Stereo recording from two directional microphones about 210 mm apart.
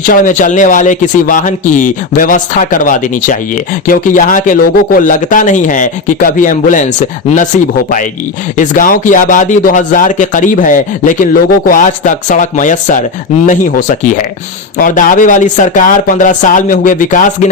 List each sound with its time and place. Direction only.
0.0 s speech: 40° left (ahead or behind)
8.5 s speech: 40° left (ahead or behind)